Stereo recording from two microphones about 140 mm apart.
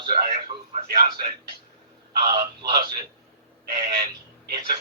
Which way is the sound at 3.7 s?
60° right (ahead or behind).